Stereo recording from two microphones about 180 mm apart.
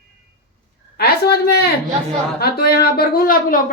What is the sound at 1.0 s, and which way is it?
A woman's voice, 65° left (ahead or behind).